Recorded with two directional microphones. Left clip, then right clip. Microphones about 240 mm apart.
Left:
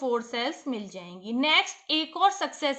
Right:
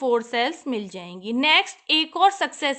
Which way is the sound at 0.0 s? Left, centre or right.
Right.